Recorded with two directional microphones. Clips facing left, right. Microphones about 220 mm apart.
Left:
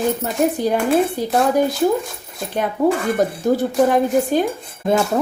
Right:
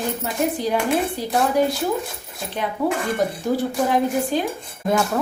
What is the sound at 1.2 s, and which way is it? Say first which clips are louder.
Speech: left 5 dB; 50° left (ahead or behind).